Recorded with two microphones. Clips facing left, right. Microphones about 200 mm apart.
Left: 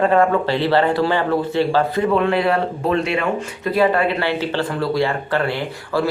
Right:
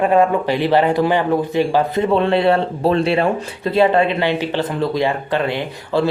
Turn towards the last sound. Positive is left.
turn(degrees=-20)  # may be behind; listen again after turning